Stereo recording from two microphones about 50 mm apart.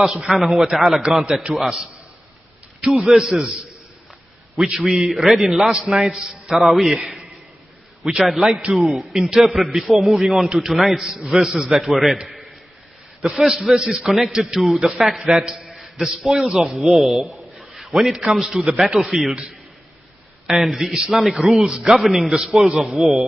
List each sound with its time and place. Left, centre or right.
0.4 s a man's voice: centre
1.5 s a man's voice: right
2.9 s a man's voice: centre
3.2 s a man's voice: centre
4.6 s a man's voice: centre
8.3 s a man's voice: centre
13.3 s a man's voice: centre
15.2 s a man's voice: centre
15.6 s a sound: centre
16.1 s a man's voice: centre
17.7 s a sound: centre
18.3 s a man's voice: centre
20.4 s a man's voice: centre